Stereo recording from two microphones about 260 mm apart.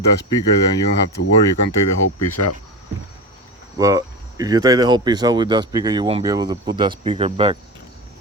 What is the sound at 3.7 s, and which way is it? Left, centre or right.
Speech, centre.